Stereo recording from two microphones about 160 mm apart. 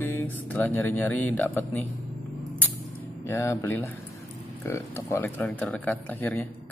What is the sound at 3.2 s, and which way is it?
Speech, 15° left (ahead or behind).